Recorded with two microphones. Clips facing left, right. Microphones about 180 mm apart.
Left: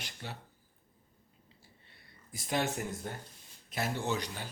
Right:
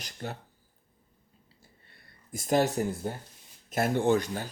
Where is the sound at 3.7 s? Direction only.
50° right (ahead or behind).